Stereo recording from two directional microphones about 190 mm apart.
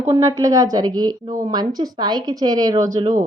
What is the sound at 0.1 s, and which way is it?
Speech, 20° right (ahead or behind).